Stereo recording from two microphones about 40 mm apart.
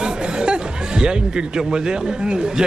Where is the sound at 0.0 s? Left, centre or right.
Right.